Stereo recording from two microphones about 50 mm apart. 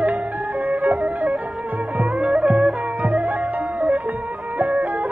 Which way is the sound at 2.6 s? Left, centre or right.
Right.